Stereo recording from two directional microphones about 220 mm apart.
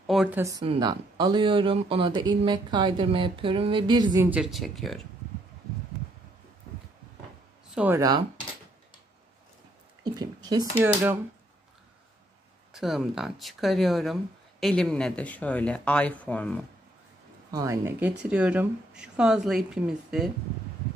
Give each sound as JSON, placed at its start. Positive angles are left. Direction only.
{"t": 0.0, "sound": "a sound", "side_deg": 0}
{"t": 0.4, "sound": "speech", "side_deg": -15}
{"t": 4.3, "sound": "speech", "side_deg": 0}
{"t": 7.7, "sound": "speech", "side_deg": -10}
{"t": 10.0, "sound": "speech", "side_deg": -20}
{"t": 12.7, "sound": "speech", "side_deg": 0}
{"t": 17.5, "sound": "speech", "side_deg": -15}